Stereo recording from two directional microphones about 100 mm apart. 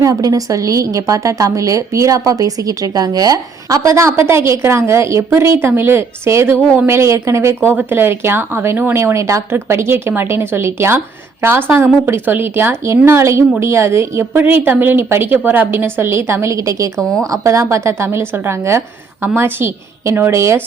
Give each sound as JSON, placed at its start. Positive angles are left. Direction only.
{"t": 0.0, "sound": "a woman's voice", "side_deg": -35}